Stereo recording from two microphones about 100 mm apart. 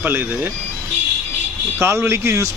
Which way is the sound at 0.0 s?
20° right (ahead or behind).